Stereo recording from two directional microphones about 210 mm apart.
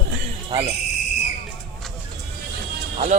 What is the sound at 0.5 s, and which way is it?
Speech, 25° right (ahead or behind).